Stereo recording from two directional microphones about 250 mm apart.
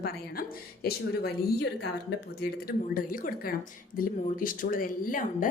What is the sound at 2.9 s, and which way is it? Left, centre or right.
A woman's voice, left.